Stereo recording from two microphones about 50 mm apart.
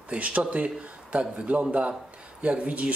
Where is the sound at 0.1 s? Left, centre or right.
Right.